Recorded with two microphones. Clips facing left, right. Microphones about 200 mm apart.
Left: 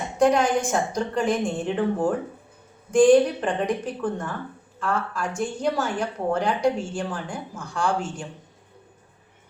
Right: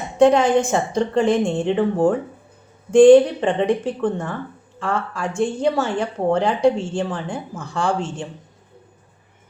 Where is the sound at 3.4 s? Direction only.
25° right (ahead or behind).